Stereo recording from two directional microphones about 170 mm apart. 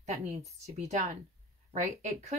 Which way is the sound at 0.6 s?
40° right (ahead or behind).